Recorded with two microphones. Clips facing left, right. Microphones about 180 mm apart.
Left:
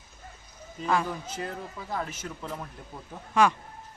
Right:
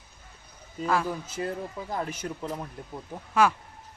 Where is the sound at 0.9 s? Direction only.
Centre (ahead or behind).